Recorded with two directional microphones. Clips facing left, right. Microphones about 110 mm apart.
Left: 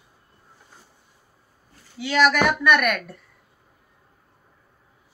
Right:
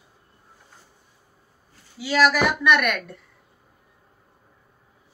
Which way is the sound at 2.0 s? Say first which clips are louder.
Even; 5° right (ahead or behind).